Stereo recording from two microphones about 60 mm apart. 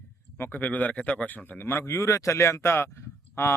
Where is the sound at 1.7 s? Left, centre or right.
Left.